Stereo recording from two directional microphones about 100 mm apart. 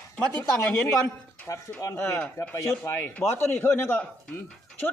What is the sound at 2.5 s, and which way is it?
A man's voice, 25° left (ahead or behind).